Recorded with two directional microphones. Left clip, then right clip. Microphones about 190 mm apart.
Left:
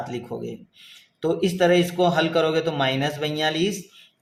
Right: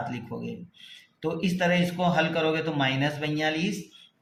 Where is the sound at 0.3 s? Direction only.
45° left (ahead or behind).